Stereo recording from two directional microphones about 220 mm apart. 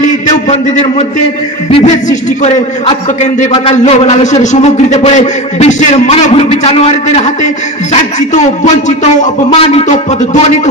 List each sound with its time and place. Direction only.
0.5 s a man's voice: 30° left (ahead or behind)